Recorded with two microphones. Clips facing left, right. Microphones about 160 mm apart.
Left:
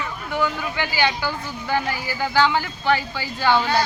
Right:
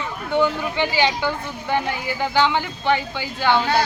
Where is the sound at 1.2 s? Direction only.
20° right (ahead or behind).